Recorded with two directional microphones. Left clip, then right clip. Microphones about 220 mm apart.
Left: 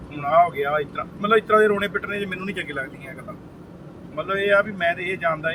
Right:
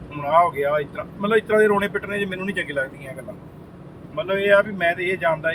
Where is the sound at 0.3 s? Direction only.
10° right (ahead or behind).